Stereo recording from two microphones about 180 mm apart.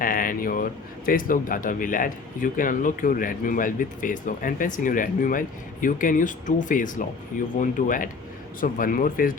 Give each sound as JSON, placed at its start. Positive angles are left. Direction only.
{"t": 0.0, "sound": "speech", "side_deg": 50}